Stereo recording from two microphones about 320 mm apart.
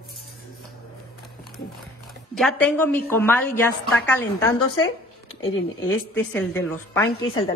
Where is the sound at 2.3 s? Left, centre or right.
Centre.